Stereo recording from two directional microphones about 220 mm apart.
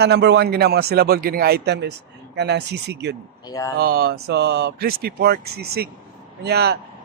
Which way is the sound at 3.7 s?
45° right (ahead or behind).